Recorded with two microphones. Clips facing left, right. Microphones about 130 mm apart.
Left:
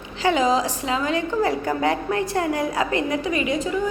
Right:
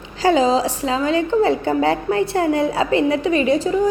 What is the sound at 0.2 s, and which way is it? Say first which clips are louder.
A woman's voice: right 4 dB; 35° right (ahead or behind).